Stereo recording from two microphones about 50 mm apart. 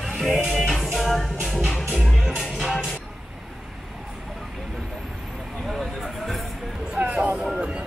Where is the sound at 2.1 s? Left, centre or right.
Centre.